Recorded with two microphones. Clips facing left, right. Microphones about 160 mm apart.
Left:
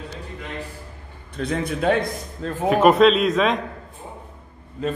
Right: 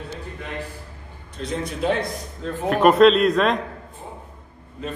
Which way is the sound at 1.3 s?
60° left (ahead or behind).